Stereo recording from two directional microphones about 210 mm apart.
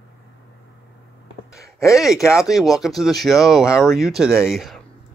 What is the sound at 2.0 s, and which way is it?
Speech, centre (ahead or behind).